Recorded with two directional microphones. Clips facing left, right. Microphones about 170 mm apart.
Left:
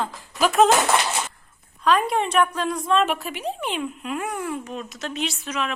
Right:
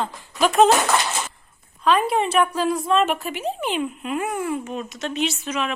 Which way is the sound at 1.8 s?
Centre (ahead or behind).